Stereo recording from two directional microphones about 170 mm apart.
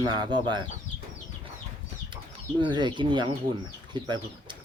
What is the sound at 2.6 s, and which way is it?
Speech, 25° right (ahead or behind).